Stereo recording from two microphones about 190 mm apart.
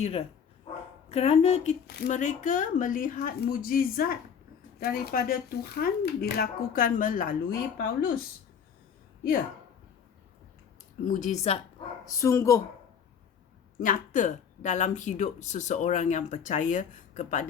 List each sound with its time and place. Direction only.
0.0 s speech: 30° left (ahead or behind); by 8.2 s 50° left (ahead or behind)
11.0 s speech: 40° left (ahead or behind)
12.0 s speech: 15° left (ahead or behind)
13.7 s speech: 45° left (ahead or behind)